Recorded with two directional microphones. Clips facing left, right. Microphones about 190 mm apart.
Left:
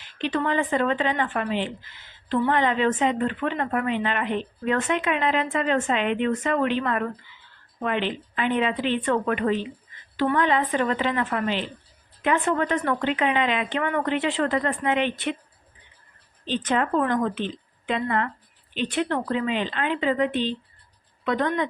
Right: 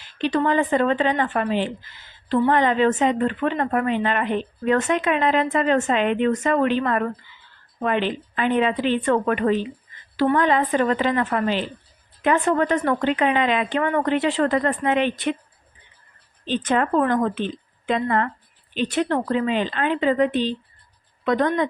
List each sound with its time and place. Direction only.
0.2 s speech: 35° right (ahead or behind)
16.5 s a woman's voice: 50° right (ahead or behind)